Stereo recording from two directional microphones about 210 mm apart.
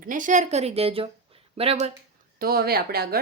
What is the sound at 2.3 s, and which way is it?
Speech, 45° right (ahead or behind).